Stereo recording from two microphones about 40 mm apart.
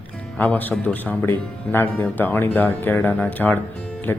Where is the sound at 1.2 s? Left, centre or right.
Left.